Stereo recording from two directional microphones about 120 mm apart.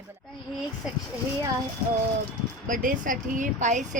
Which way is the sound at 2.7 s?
90° right.